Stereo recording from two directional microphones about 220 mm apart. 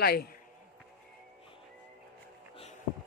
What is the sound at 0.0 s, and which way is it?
Speech, 45° left (ahead or behind).